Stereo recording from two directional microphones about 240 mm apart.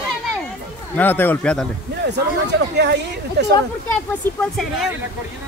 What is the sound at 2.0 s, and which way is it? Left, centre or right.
Speech, right.